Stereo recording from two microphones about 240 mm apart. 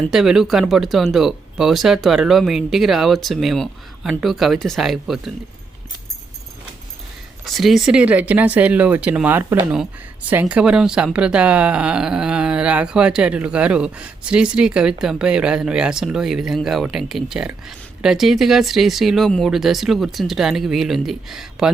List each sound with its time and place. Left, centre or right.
0.0 s speech: centre
7.4 s speech: centre